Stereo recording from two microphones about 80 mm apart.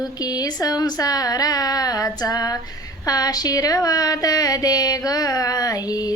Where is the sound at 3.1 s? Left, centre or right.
Left.